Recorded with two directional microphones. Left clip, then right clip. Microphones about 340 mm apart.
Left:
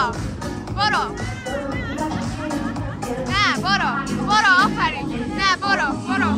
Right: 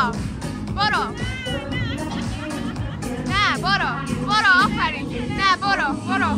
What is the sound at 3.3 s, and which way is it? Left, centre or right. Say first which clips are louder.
Music: even; centre.